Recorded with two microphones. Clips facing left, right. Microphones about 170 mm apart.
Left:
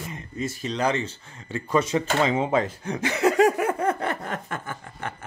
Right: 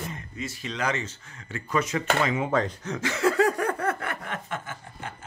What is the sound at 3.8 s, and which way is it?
Speech, 25° left (ahead or behind).